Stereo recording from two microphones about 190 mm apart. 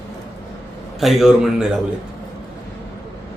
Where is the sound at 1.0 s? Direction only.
Centre (ahead or behind).